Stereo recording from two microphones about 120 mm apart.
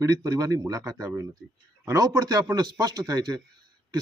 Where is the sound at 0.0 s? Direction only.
30° right (ahead or behind).